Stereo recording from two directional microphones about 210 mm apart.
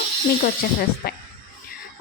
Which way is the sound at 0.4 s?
45° left (ahead or behind).